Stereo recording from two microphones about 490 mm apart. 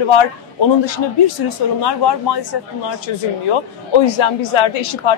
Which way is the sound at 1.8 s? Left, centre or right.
Left.